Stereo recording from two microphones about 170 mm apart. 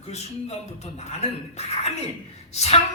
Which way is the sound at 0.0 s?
40° left (ahead or behind).